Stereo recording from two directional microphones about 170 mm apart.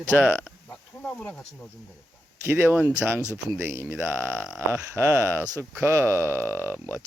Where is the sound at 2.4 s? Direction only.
15° right (ahead or behind).